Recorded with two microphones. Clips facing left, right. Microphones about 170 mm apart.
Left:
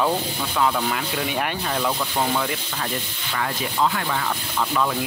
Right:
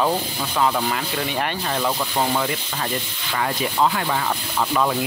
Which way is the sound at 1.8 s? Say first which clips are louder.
Right 2 dB; 10° right (ahead or behind).